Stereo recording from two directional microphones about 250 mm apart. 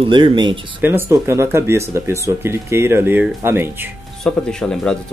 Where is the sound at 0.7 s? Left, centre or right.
Centre.